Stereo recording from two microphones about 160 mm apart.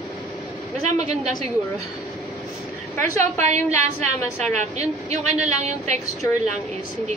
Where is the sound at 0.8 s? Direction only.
45° right (ahead or behind).